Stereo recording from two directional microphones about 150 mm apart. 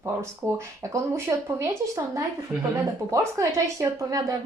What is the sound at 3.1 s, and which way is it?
A woman's voice, 20° right (ahead or behind).